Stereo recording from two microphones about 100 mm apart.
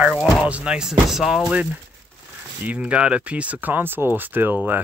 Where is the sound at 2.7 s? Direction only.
15° right (ahead or behind).